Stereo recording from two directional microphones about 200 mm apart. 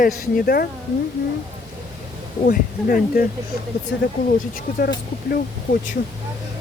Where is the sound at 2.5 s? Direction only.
45° left (ahead or behind).